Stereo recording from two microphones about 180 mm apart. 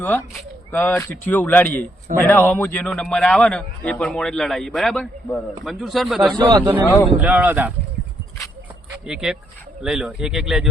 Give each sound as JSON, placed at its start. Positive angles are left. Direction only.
{"t": 0.0, "sound": "a man's voice", "side_deg": 10}
{"t": 6.8, "sound": "speech", "side_deg": 15}
{"t": 7.1, "sound": "speech", "side_deg": -5}
{"t": 9.0, "sound": "a man's voice", "side_deg": -5}